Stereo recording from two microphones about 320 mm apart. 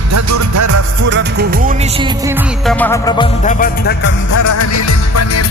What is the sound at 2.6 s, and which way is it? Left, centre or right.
Music, centre.